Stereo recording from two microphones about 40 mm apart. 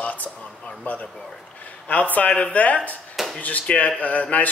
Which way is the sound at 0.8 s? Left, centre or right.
Left.